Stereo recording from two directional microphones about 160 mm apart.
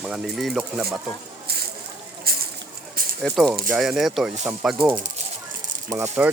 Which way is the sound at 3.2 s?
Centre (ahead or behind).